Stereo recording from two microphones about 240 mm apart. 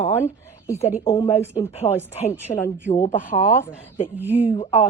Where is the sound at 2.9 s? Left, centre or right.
Left.